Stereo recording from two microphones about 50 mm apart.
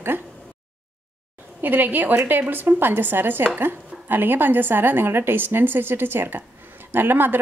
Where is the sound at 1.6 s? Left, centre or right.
Right.